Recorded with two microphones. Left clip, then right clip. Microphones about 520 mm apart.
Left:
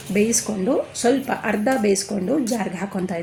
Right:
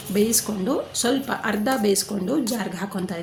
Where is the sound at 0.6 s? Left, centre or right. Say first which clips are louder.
Left 5 dB; right.